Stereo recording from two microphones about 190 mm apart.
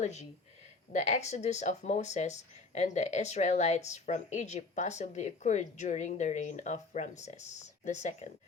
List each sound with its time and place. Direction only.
0.0 s speech: 35° left (ahead or behind)